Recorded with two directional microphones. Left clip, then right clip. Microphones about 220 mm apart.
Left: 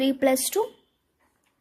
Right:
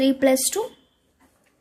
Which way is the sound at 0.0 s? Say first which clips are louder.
Right 3 dB; 15° left (ahead or behind).